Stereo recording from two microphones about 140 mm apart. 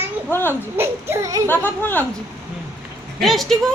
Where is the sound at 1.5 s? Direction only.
15° left (ahead or behind).